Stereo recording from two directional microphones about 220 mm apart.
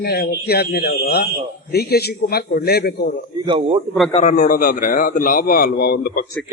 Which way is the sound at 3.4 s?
25° right (ahead or behind).